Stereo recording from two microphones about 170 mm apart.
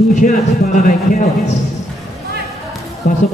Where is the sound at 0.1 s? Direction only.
50° left (ahead or behind).